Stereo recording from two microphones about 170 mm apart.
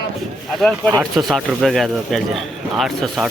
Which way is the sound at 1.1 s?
Centre (ahead or behind).